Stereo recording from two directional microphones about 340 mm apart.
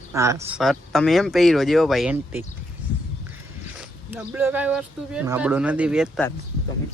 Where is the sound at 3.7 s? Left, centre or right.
Centre.